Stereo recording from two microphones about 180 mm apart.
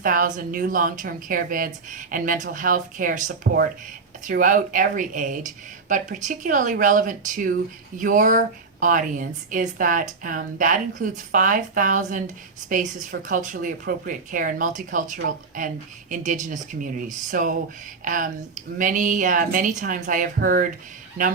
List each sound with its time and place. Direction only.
0.0 s speech: 50° right (ahead or behind)